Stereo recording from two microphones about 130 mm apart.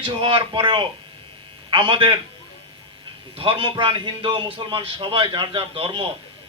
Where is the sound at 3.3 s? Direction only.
40° right (ahead or behind).